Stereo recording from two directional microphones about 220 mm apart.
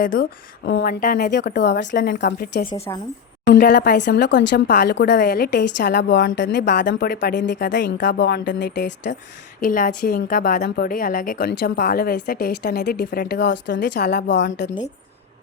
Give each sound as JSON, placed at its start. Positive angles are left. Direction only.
{"t": 0.0, "sound": "a woman's voice", "side_deg": 40}
{"t": 9.6, "sound": "a woman's voice", "side_deg": 40}